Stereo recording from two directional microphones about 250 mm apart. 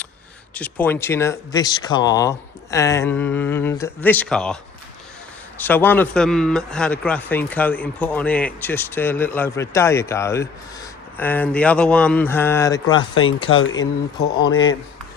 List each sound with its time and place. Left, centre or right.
0.5 s a man's voice: centre
5.5 s a man's voice: centre
13.5 s speech: left
14.3 s speech: centre